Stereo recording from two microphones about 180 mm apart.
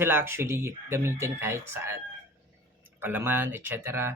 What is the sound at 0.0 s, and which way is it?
A man's voice, 10° right (ahead or behind).